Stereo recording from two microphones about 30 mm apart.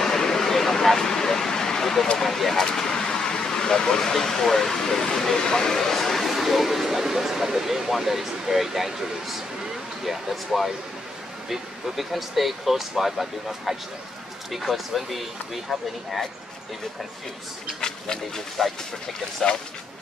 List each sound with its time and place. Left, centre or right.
0.0 s a sound: centre
1.5 s vehicle: centre
2.1 s speech: centre
17.7 s speech: centre